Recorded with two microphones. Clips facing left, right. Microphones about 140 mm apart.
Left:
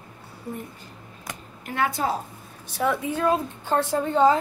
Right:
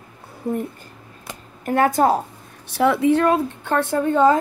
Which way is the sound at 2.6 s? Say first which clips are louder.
Right 8 dB; 75° right (ahead or behind).